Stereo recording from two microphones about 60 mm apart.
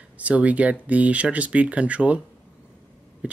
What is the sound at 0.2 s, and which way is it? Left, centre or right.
Speech, right.